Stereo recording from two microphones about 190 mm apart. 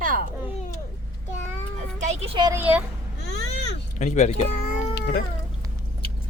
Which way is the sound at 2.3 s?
20° right (ahead or behind).